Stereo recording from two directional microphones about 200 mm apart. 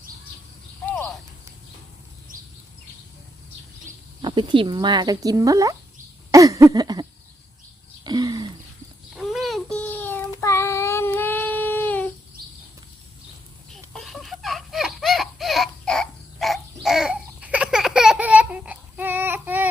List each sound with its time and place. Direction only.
0.9 s clip-clop: 10° left (ahead or behind)
4.2 s speech: 25° right (ahead or behind)
6.3 s a sound: 15° right (ahead or behind)
8.0 s throat clearing: 20° right (ahead or behind)
9.1 s child singing: centre (ahead or behind)
13.9 s baby laughter: centre (ahead or behind)
16.8 s babbling: centre (ahead or behind)